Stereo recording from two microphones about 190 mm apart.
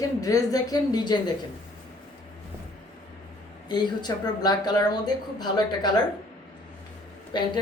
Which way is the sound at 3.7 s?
20° left (ahead or behind).